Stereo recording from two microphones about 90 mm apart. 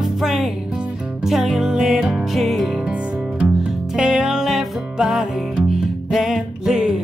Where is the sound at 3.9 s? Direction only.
10° right (ahead or behind).